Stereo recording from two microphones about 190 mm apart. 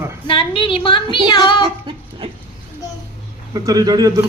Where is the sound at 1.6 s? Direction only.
25° right (ahead or behind).